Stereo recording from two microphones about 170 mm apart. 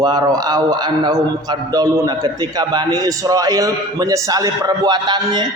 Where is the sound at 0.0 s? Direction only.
25° right (ahead or behind).